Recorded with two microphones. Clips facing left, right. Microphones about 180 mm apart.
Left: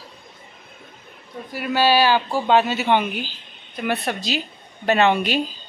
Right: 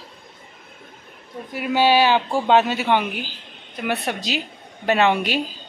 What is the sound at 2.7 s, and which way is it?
Speech, 10° right (ahead or behind).